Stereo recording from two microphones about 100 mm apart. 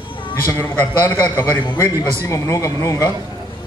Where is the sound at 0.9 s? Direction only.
45° left (ahead or behind).